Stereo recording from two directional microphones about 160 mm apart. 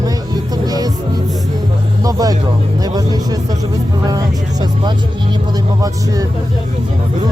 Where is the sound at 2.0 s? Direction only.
25° right (ahead or behind).